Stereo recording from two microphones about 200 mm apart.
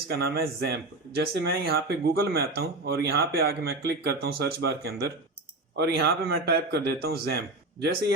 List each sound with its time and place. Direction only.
0.1 s speech: 50° right (ahead or behind)